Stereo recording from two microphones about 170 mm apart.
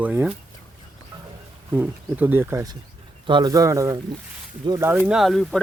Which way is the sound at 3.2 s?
25° right (ahead or behind).